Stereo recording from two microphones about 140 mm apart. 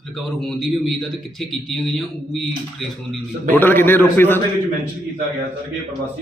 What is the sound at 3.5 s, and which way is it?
Speech, 15° left (ahead or behind).